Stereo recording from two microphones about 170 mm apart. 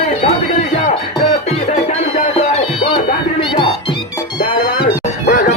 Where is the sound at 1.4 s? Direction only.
40° left (ahead or behind).